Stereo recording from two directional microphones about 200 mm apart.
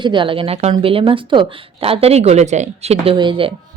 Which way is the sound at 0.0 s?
25° right (ahead or behind).